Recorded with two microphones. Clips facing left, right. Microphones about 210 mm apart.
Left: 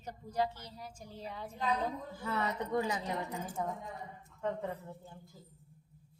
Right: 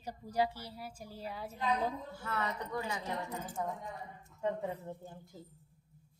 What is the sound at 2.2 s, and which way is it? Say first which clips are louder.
Speech: left 3 dB; 15° left (ahead or behind).